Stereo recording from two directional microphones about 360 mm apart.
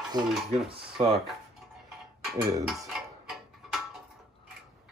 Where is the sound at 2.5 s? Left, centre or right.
Centre.